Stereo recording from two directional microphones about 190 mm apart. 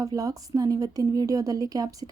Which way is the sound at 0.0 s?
20° right (ahead or behind).